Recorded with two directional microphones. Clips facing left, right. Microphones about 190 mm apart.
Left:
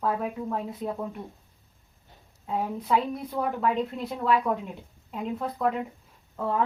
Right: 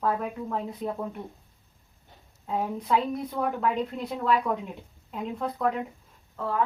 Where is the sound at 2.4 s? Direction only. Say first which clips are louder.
Even; 5° left (ahead or behind).